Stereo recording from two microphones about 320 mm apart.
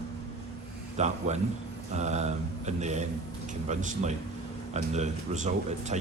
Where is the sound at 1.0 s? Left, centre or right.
Right.